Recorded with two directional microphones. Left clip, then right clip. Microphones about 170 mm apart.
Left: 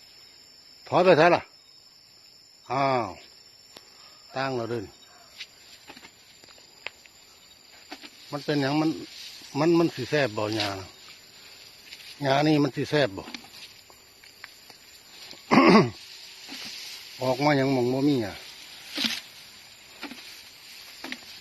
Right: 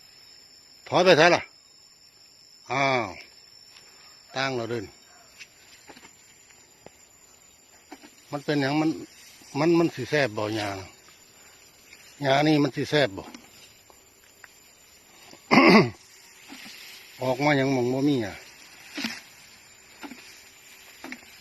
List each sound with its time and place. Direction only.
0.9 s speech: 15° right (ahead or behind)
2.6 s speech: 10° right (ahead or behind)
4.3 s speech: 10° right (ahead or behind)
8.4 s speech: 15° right (ahead or behind)
8.8 s speech: centre (ahead or behind)
9.6 s speech: 15° right (ahead or behind)
12.2 s speech: 15° right (ahead or behind)
15.3 s throat clearing: 20° right (ahead or behind)
17.2 s speech: 5° right (ahead or behind)